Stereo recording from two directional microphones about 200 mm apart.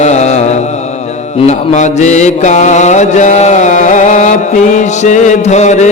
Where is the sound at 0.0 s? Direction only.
35° left (ahead or behind).